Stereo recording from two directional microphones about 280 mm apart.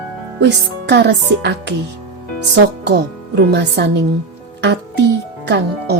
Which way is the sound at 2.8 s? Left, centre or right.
Right.